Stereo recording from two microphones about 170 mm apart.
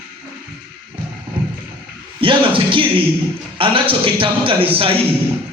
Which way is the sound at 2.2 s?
30° right (ahead or behind).